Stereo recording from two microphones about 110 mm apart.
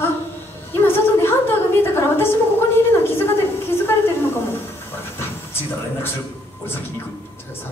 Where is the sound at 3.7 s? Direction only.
20° left (ahead or behind).